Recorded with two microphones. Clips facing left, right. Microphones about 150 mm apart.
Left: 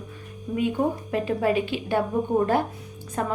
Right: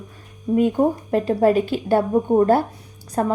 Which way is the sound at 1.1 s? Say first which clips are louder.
Right 7 dB; 40° right (ahead or behind).